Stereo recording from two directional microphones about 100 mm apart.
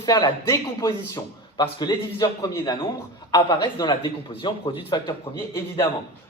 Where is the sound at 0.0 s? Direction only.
45° left (ahead or behind).